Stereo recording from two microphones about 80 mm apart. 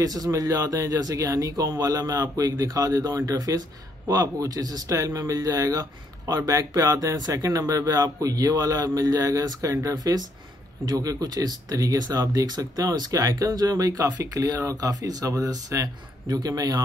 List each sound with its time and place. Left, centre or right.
0.0 s speech: right